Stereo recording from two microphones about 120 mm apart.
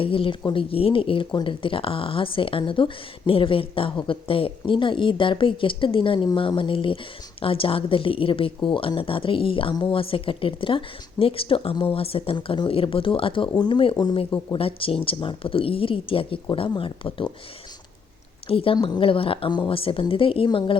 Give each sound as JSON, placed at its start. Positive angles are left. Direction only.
{"t": 0.0, "sound": "speech", "side_deg": 50}
{"t": 14.5, "sound": "speech", "side_deg": 50}
{"t": 18.4, "sound": "speech", "side_deg": 50}